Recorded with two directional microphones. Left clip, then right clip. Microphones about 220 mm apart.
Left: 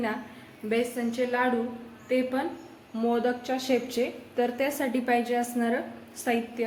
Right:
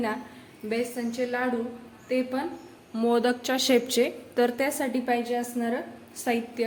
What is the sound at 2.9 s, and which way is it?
A woman's voice, 25° right (ahead or behind).